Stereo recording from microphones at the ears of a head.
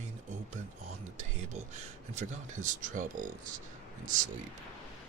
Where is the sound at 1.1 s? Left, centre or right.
Right.